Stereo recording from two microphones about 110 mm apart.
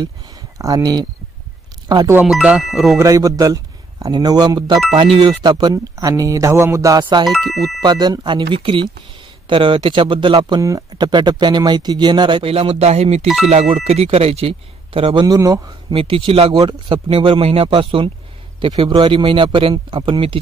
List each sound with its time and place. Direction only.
0.0 s speech: 35° right (ahead or behind)
2.2 s speech: 5° right (ahead or behind)
3.0 s speech: 30° right (ahead or behind); by 5.4 s 55° right (ahead or behind)
5.4 s speech: 40° right (ahead or behind)
7.0 s speech: 45° right (ahead or behind)
7.2 s speech: centre (ahead or behind)
7.8 s speech: 40° right (ahead or behind); by 15.2 s 55° right (ahead or behind)
15.2 s speech: 35° right (ahead or behind)
15.9 s speech: 55° right (ahead or behind)